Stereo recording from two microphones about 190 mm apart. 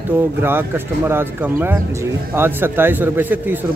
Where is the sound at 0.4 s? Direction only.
10° right (ahead or behind).